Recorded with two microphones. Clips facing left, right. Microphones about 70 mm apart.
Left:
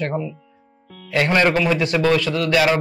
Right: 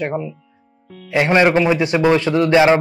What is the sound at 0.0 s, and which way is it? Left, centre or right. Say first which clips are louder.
A man's voice: right 2 dB; centre.